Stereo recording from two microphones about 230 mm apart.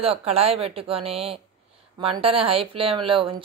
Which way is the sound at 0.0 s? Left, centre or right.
Right.